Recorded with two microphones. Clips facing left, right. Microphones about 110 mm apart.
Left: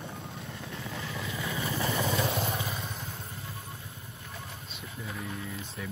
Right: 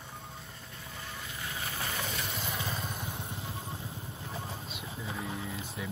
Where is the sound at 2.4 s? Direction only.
30° left (ahead or behind).